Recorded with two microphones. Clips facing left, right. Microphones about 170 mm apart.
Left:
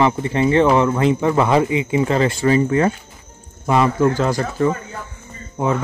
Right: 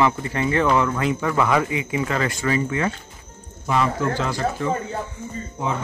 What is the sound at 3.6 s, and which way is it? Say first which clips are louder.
Speech: left 6 dB; 55° left (ahead or behind).